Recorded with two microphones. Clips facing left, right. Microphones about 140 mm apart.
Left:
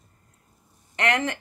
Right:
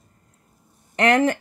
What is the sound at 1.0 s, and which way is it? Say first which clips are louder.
Speech: right 7 dB; 40° right (ahead or behind).